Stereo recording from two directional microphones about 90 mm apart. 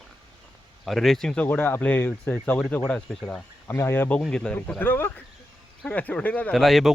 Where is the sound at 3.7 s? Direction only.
30° left (ahead or behind).